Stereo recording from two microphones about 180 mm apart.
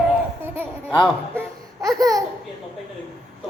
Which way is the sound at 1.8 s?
20° right (ahead or behind).